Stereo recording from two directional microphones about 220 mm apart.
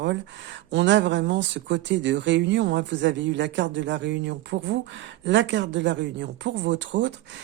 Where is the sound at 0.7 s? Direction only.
55° right (ahead or behind).